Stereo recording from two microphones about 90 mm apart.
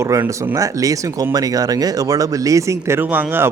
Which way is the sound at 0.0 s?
35° right (ahead or behind).